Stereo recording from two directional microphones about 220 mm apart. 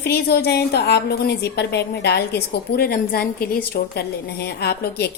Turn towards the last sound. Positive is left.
turn(degrees=50)  # may be behind; listen again after turning